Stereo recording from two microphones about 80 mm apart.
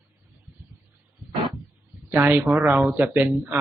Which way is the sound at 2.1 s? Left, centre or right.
Right.